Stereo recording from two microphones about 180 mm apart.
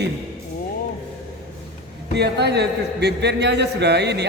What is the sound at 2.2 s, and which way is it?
A man's voice, 65° right (ahead or behind).